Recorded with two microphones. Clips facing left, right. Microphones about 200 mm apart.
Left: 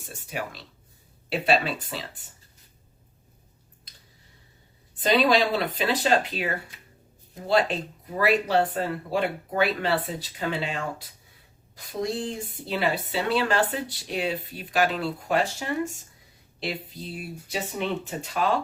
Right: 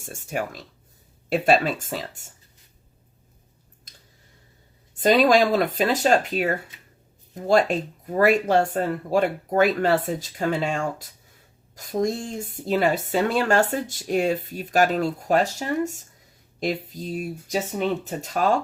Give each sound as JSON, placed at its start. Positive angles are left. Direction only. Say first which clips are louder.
{"t": 0.0, "sound": "speech", "louder": "right 5 dB", "side_deg": -45}
{"t": 4.9, "sound": "speech", "louder": "right 4 dB", "side_deg": -45}